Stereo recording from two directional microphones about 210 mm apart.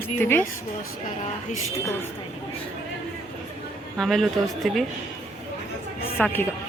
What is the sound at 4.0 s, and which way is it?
Speech, centre (ahead or behind).